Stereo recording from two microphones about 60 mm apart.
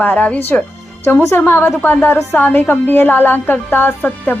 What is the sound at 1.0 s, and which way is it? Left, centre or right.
A woman's voice, left.